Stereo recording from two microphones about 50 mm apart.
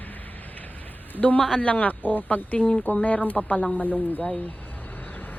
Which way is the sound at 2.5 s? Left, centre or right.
Centre.